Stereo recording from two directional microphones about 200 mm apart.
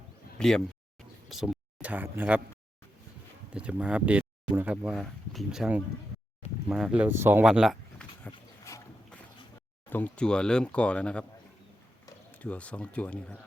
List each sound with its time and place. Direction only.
0.3 s speech: 5° left (ahead or behind)
3.5 s speech: 5° right (ahead or behind)
8.3 s a sound: 15° left (ahead or behind)
9.9 s speech: 5° left (ahead or behind)
12.3 s speech: 5° left (ahead or behind)